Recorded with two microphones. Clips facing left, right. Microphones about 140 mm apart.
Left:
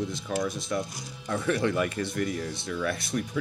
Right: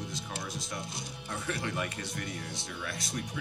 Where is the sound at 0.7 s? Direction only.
90° left.